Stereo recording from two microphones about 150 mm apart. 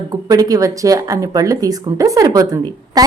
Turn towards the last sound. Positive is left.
turn(degrees=-25)  # may be behind; listen again after turning